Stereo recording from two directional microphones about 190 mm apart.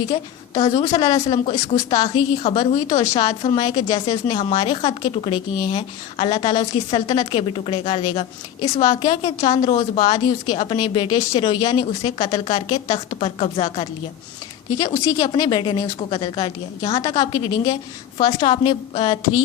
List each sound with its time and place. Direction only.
0.0 s a woman's voice: 25° left (ahead or behind)
14.8 s a woman's voice: 20° left (ahead or behind)